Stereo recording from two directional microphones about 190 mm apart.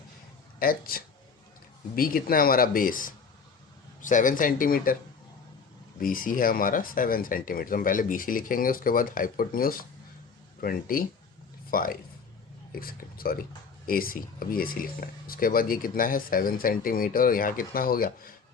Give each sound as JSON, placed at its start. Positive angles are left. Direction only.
{"t": 0.6, "sound": "speech", "side_deg": 50}
{"t": 6.0, "sound": "speech", "side_deg": 45}